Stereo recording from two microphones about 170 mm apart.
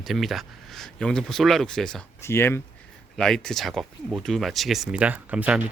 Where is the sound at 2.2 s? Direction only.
15° left (ahead or behind).